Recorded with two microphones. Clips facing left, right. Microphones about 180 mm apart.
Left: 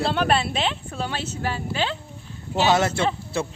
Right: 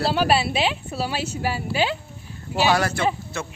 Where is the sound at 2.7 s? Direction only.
25° left (ahead or behind).